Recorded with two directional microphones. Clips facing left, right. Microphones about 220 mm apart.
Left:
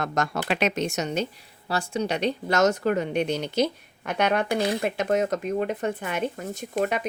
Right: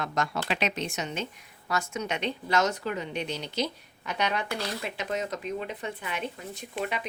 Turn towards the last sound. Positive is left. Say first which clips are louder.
# left 7 dB
turn(degrees=45)  # may be behind; listen again after turning